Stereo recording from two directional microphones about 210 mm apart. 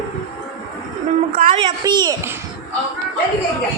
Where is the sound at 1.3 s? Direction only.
40° right (ahead or behind).